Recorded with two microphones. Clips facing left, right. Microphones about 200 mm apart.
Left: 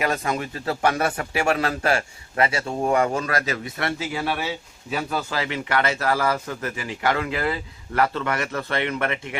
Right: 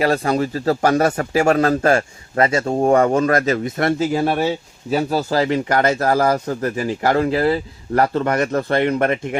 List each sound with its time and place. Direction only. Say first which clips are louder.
0.0 s speech: right 7 dB; 35° right (ahead or behind)